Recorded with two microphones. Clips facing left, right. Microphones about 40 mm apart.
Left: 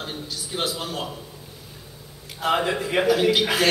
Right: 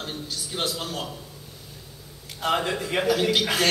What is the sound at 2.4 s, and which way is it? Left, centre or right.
A man's voice, centre.